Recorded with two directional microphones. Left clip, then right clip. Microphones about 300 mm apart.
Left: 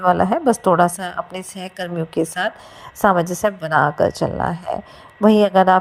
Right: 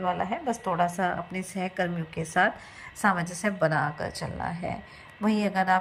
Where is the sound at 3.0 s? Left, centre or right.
Left.